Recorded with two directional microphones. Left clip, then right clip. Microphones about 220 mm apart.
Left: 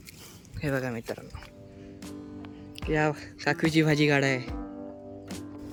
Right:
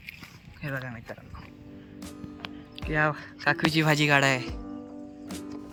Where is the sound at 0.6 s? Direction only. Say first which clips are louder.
Left 5 dB; 20° left (ahead or behind).